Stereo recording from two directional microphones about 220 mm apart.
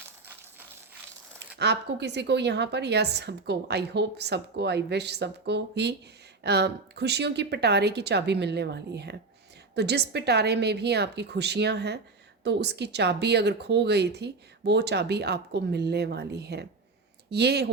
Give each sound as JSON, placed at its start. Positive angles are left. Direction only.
{"t": 1.5, "sound": "a woman's voice", "side_deg": -50}